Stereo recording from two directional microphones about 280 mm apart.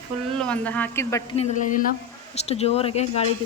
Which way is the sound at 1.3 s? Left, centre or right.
Left.